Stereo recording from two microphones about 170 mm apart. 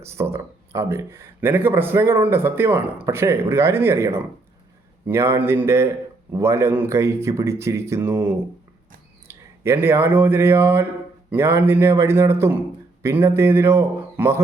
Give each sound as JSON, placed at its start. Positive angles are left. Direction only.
{"t": 0.0, "sound": "speech", "side_deg": -15}